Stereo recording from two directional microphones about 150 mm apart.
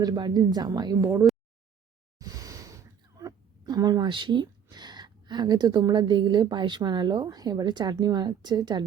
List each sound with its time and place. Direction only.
0.0 s a woman's voice: 25° right (ahead or behind)